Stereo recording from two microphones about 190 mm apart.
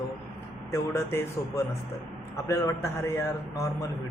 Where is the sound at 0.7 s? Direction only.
15° left (ahead or behind).